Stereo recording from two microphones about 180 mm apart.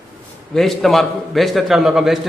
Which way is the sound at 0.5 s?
Centre (ahead or behind).